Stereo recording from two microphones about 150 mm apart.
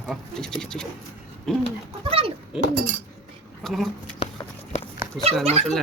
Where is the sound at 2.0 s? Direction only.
40° right (ahead or behind).